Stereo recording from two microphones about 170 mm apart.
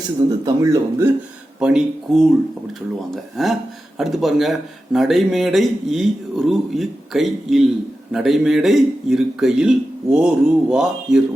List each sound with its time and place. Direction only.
0.4 s speech: 20° right (ahead or behind)
1.5 s speech: 5° right (ahead or behind)
3.4 s speech: centre (ahead or behind)